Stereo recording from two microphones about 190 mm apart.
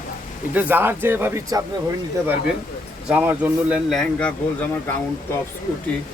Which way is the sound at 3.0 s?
5° right (ahead or behind).